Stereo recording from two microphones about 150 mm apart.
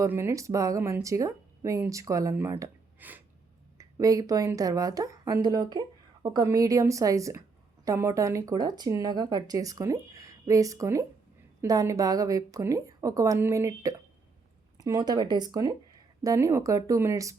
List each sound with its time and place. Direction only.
0.0 s speech: 15° right (ahead or behind)
3.8 s speech: 20° right (ahead or behind)